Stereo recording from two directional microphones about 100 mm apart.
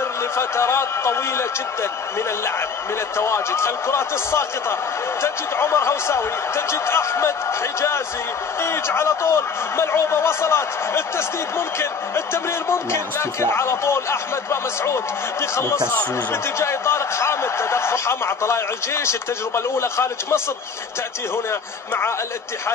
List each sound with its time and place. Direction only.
0.4 s speech: 25° left (ahead or behind)
3.2 s speech: 25° left (ahead or behind)
8.5 s speech: 25° left (ahead or behind)
21.5 s speech: 25° left (ahead or behind)